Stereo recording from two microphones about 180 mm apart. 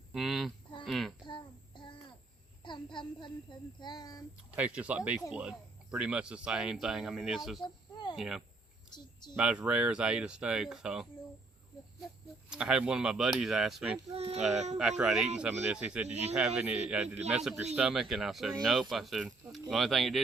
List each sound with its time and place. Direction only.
0.1 s a sound: centre (ahead or behind)
0.9 s speech: centre (ahead or behind)
1.3 s child singing: 25° left (ahead or behind)
2.6 s a sound: 25° left (ahead or behind)
3.8 s child singing: 25° left (ahead or behind)
4.5 s speech: 5° right (ahead or behind)
7.6 s a sound: 25° left (ahead or behind)
8.1 s speech: centre (ahead or behind)
12.5 s speech: 5° right (ahead or behind)
14.1 s child singing: 35° right (ahead or behind)
14.5 s speech: 40° right (ahead or behind)
14.8 s speech: 5° right (ahead or behind)
16.0 s speech: 35° right (ahead or behind)
16.6 s speech: 5° right (ahead or behind)